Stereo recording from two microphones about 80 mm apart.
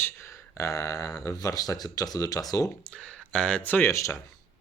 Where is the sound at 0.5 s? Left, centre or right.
Left.